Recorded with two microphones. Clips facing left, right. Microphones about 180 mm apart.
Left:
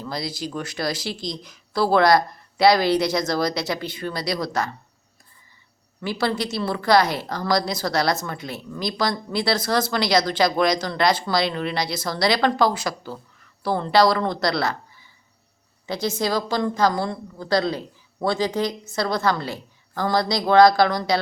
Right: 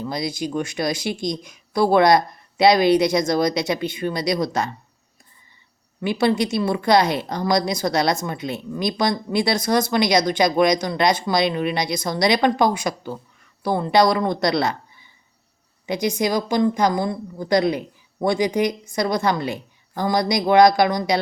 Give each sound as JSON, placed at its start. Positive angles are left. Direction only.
{"t": 0.0, "sound": "a woman's voice", "side_deg": -20}
{"t": 6.0, "sound": "a woman's voice", "side_deg": -20}